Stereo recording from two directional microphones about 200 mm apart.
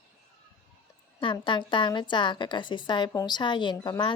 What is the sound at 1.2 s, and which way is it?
A woman's voice, 25° left (ahead or behind).